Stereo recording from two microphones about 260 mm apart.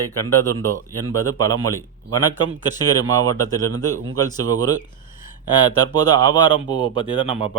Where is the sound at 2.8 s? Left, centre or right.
Centre.